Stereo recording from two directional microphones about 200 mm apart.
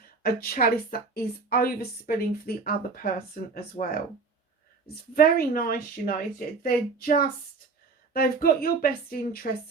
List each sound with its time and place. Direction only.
0.2 s a woman's voice: 50° left (ahead or behind)
5.1 s a woman's voice: 50° left (ahead or behind)